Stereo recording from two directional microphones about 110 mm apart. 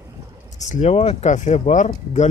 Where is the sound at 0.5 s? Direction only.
90° left.